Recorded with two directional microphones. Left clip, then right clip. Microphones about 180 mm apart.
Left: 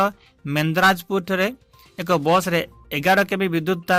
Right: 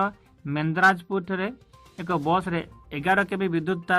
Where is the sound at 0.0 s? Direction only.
40° left (ahead or behind).